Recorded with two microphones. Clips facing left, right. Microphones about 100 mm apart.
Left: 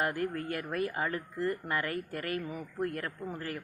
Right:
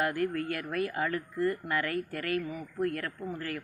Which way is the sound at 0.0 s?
25° left (ahead or behind).